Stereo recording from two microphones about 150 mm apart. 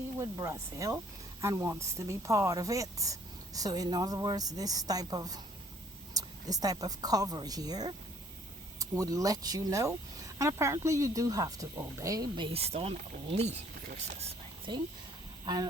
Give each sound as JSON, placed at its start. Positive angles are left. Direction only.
{"t": 0.2, "sound": "a woman's voice", "side_deg": -20}
{"t": 12.5, "sound": "speech", "side_deg": -40}
{"t": 14.1, "sound": "a sound", "side_deg": -45}